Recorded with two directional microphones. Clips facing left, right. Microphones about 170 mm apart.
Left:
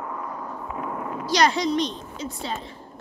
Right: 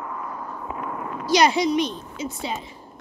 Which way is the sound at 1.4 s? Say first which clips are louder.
Right 2 dB; 10° right (ahead or behind).